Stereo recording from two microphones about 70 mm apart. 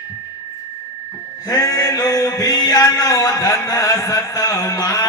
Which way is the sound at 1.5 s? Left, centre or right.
Left.